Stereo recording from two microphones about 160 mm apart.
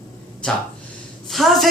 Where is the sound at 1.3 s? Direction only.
Centre (ahead or behind).